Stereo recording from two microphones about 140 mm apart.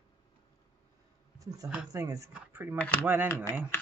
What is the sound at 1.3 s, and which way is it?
Speech, 25° right (ahead or behind).